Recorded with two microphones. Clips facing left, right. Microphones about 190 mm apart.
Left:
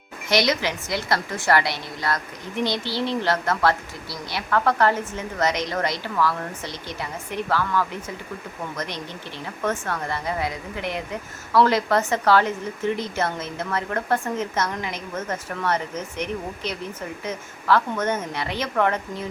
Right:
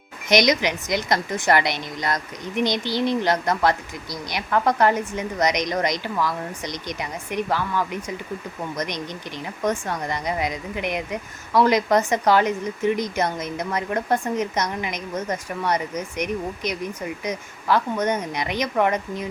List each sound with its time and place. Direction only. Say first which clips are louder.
0.3 s speech: right 3 dB; 20° right (ahead or behind)